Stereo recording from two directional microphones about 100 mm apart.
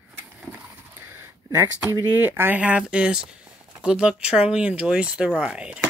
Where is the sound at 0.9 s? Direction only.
25° right (ahead or behind).